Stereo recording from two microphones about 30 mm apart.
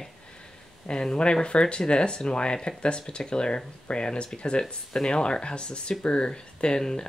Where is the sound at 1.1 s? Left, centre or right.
Left.